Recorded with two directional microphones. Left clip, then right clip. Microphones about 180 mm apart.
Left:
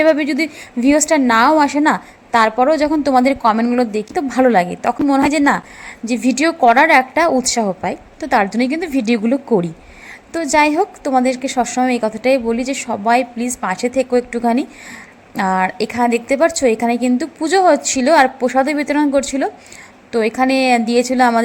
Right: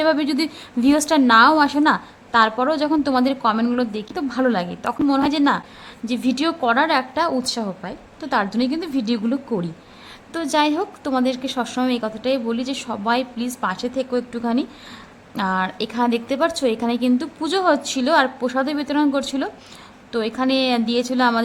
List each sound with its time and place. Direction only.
0.0 s a woman's voice: 10° left (ahead or behind)